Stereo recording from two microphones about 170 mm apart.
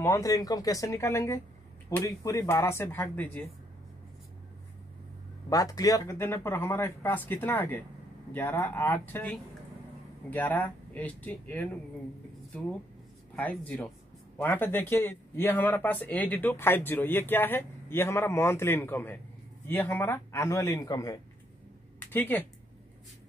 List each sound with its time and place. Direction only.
0.0 s speech: 20° left (ahead or behind)
5.5 s speech: 20° left (ahead or behind)
13.4 s speech: 10° left (ahead or behind)